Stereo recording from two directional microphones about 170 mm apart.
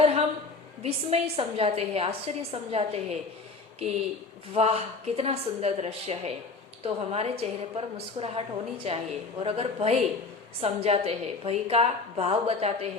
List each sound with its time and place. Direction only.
0.0 s a sound: 35° right (ahead or behind)
0.8 s a woman's voice: 35° right (ahead or behind)
4.5 s a woman's voice: 35° right (ahead or behind)